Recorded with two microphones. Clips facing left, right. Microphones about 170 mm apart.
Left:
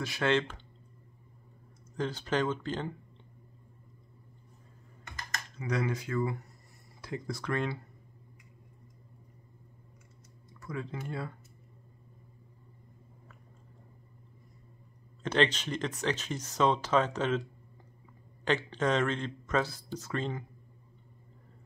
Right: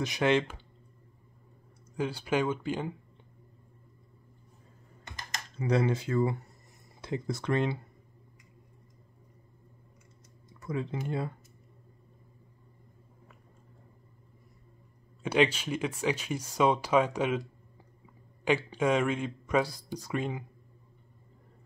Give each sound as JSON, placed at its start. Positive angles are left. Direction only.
{"t": 0.0, "sound": "speech", "side_deg": -15}
{"t": 2.0, "sound": "speech", "side_deg": -10}
{"t": 5.6, "sound": "speech", "side_deg": -30}
{"t": 10.6, "sound": "speech", "side_deg": -20}
{"t": 15.2, "sound": "speech", "side_deg": -10}
{"t": 18.4, "sound": "speech", "side_deg": -10}